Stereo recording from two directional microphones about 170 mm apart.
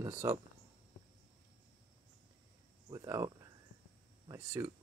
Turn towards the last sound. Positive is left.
turn(degrees=-15)  # may be behind; listen again after turning